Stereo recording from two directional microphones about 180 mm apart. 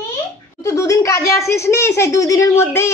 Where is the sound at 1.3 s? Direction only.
15° left (ahead or behind).